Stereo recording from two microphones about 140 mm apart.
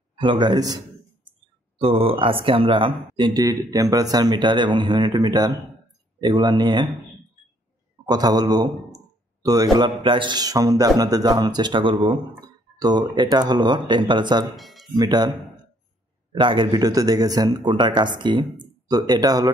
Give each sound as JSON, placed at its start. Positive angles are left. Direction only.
{"t": 0.2, "sound": "speech", "side_deg": -35}
{"t": 1.8, "sound": "speech", "side_deg": -40}
{"t": 8.1, "sound": "speech", "side_deg": -30}
{"t": 14.5, "sound": "speech", "side_deg": 0}
{"t": 15.0, "sound": "speech", "side_deg": -30}